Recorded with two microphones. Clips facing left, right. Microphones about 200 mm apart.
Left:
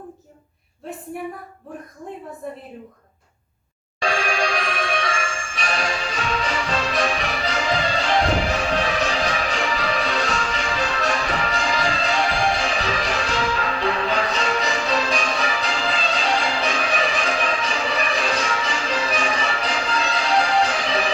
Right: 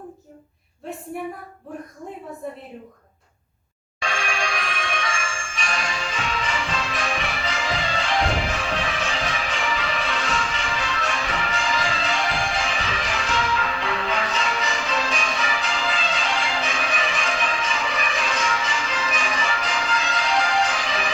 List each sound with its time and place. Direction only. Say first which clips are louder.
4.0 s jingle bell: left 5 dB; 35° left (ahead or behind)
20.5 s music: left 3 dB; 35° left (ahead or behind)